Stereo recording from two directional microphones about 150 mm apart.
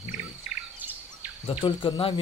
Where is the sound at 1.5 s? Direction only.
35° left (ahead or behind).